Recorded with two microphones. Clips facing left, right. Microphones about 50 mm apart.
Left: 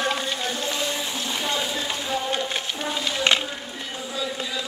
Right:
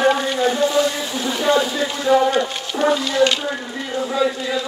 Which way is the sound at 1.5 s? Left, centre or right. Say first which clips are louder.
Right 8 dB; right.